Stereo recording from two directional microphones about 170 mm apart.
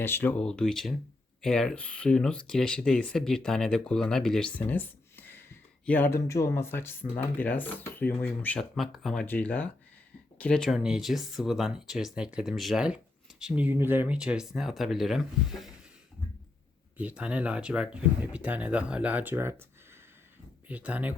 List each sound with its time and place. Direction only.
0.0 s speech: 10° left (ahead or behind)
17.0 s speech: 5° right (ahead or behind)
20.7 s speech: 10° right (ahead or behind)